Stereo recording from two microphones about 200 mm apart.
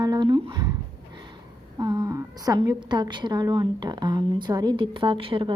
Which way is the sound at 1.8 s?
20° right (ahead or behind).